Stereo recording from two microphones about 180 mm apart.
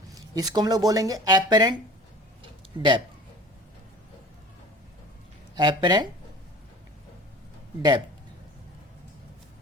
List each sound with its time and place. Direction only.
0.3 s speech: 20° right (ahead or behind)
2.4 s a sound: 25° right (ahead or behind)
5.5 s speech: 25° right (ahead or behind)
7.8 s speech: 25° right (ahead or behind)